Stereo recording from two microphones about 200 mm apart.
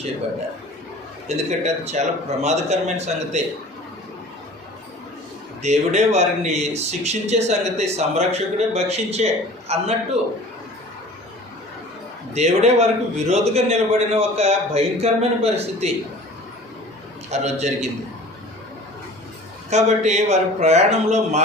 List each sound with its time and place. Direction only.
1.5 s speech: 35° right (ahead or behind)
5.6 s speech: 35° right (ahead or behind)
12.3 s speech: 35° right (ahead or behind)
17.3 s speech: 35° right (ahead or behind)
19.7 s speech: 35° right (ahead or behind)